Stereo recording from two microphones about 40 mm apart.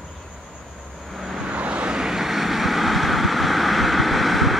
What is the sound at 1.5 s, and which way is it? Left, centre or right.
Vehicle, right.